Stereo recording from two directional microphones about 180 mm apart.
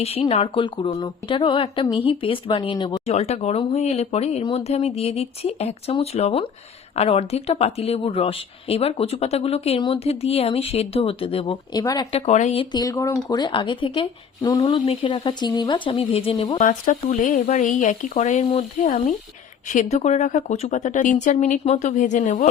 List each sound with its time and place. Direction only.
0.0 s speech: 35° left (ahead or behind)
12.2 s speech: 40° left (ahead or behind)
12.7 s speech: 20° left (ahead or behind)
16.6 s a woman's voice: 45° left (ahead or behind)